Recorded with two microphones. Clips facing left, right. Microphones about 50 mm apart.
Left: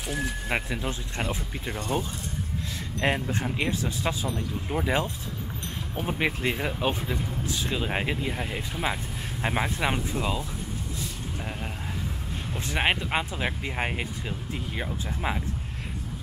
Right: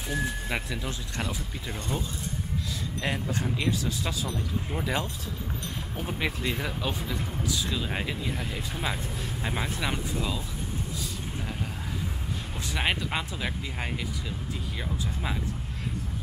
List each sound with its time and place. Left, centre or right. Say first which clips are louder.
0.5 s speech: left 3 dB; left
1.8 s speech: left 4 dB; left
12.5 s speech: left 3 dB; left